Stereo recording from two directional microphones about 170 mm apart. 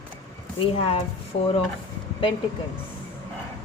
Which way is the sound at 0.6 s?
35° left (ahead or behind).